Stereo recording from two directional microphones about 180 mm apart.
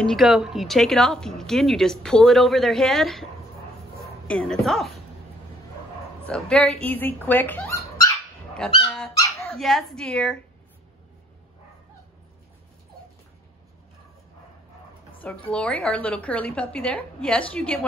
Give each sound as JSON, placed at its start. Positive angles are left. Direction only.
{"t": 0.0, "sound": "a woman's voice", "side_deg": 0}
{"t": 6.2, "sound": "speech", "side_deg": 5}
{"t": 8.8, "sound": "dog", "side_deg": 10}
{"t": 9.6, "sound": "a woman's voice", "side_deg": 0}
{"t": 15.1, "sound": "a woman's voice", "side_deg": 10}